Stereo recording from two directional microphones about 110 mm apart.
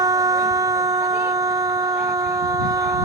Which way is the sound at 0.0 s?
35° right (ahead or behind).